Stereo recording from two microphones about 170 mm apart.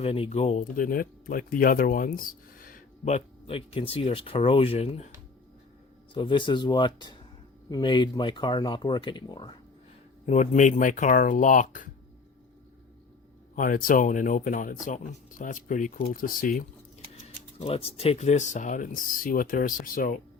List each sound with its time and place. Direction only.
0.0 s speech: 35° left (ahead or behind)
6.1 s speech: 30° left (ahead or behind)
10.2 s speech: 45° left (ahead or behind)
13.6 s speech: 55° left (ahead or behind)
17.2 s speech: 35° left (ahead or behind); by 20.1 s 55° left (ahead or behind)